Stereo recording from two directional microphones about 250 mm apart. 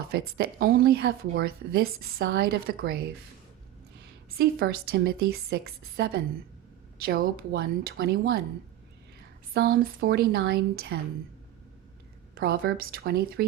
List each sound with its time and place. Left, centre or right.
0.1 s speech: right
4.3 s speech: right
9.5 s speech: right
12.3 s speech: right